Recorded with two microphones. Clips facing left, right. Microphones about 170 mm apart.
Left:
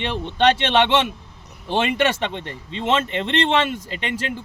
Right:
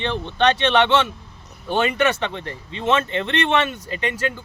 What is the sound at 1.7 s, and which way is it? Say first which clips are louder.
Speech: right 1 dB; 25° left (ahead or behind).